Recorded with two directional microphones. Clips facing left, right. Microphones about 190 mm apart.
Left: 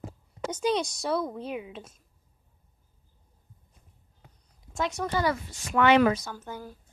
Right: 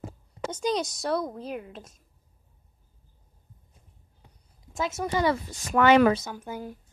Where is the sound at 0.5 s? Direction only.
5° left (ahead or behind).